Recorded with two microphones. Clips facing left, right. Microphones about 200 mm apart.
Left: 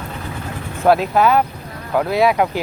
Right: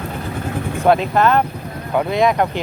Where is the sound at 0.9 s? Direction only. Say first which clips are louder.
Left 1 dB; 5° left (ahead or behind).